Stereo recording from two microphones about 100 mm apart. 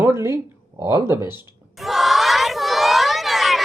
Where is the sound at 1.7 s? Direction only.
Centre (ahead or behind).